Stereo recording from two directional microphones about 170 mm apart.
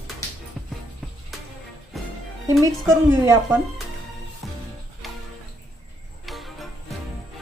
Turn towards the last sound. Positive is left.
turn(degrees=0)  # may be behind; listen again after turning